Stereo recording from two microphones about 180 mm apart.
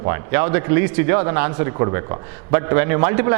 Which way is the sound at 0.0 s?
15° right (ahead or behind).